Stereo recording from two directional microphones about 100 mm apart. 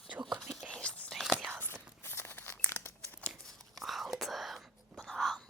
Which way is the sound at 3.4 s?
5° left (ahead or behind).